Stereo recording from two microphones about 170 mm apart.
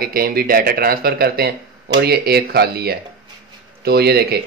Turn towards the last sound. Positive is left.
turn(degrees=-65)  # may be behind; listen again after turning